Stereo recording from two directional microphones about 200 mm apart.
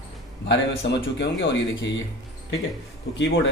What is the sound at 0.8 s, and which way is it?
Speech, 60° left (ahead or behind).